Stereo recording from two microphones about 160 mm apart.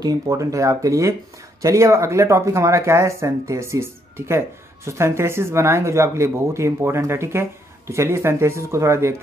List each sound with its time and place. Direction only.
0.0 s speech: 20° right (ahead or behind)